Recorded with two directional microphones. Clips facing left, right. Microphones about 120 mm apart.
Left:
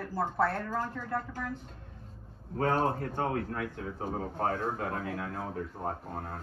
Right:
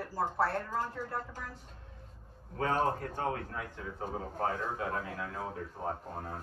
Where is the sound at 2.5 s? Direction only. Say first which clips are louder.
Left 2 dB; 45° left (ahead or behind).